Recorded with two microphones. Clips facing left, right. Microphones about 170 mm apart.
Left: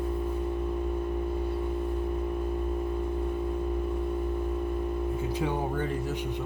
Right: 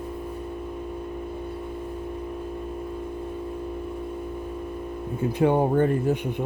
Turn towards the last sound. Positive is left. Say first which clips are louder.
# right 9 dB
turn(degrees=-55)  # may be behind; listen again after turning